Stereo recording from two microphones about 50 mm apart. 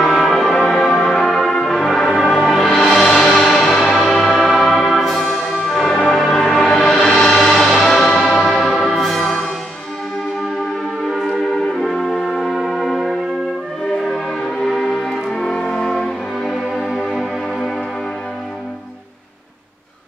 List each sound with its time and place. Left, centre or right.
0.0 s music: centre
5.2 s brass instrument: centre
6.0 s music: centre
9.2 s music: centre
11.1 s music: centre
11.7 s brass instrument: centre
13.9 s music: centre